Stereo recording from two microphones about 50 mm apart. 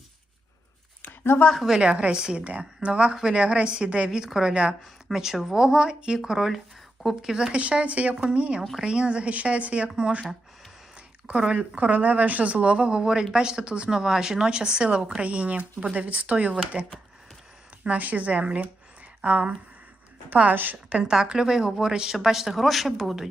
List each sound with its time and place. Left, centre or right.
1.0 s a sound: left
1.5 s speech: centre
1.8 s speech: right
7.6 s speech: right
10.9 s a sound: right
11.5 s speech: right
17.8 s speech: right
20.9 s speech: centre